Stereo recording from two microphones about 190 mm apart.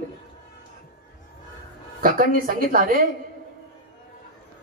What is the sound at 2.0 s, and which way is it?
Speech, 50° right (ahead or behind).